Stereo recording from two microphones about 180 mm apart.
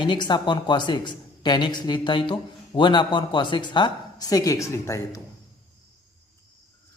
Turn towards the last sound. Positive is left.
turn(degrees=15)  # may be behind; listen again after turning